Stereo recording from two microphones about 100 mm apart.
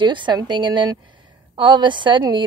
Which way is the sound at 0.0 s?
50° right (ahead or behind).